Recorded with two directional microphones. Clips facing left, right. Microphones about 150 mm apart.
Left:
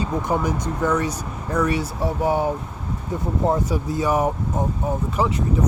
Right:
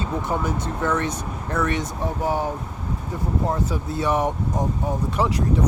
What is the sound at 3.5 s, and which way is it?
Speech, 10° left (ahead or behind).